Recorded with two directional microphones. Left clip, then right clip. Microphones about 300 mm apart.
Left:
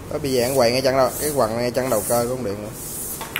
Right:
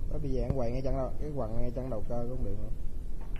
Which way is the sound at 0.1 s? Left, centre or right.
Left.